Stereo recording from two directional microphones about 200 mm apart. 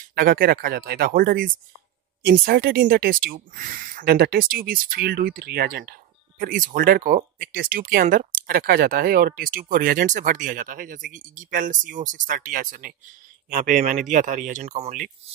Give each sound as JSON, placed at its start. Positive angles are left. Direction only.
{"t": 0.1, "sound": "speech", "side_deg": -50}